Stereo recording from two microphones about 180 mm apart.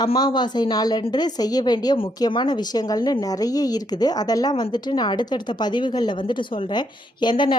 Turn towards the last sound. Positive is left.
turn(degrees=25)  # may be behind; listen again after turning